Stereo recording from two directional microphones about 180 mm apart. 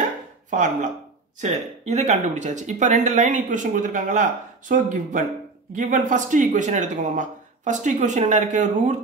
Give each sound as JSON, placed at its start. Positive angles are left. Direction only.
{"t": 0.5, "sound": "speech", "side_deg": -45}